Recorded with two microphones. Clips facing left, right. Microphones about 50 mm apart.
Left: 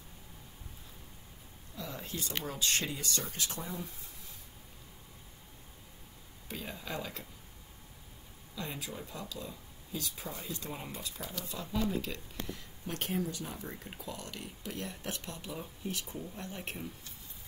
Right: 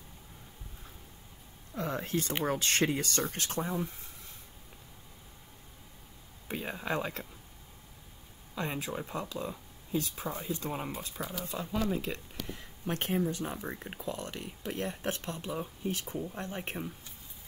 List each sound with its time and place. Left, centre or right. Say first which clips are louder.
1.8 s a sound: right 8 dB; right
2.4 s speech: right 5 dB; right
6.4 s a sound: right 6 dB; right
8.5 s speech: right 6 dB; right
10.3 s speech: right 6 dB; right
11.1 s speech: right 5 dB; centre
11.9 s speech: right 2 dB; right
15.5 s speech: right 5 dB; right
15.9 s speech: right 4 dB; right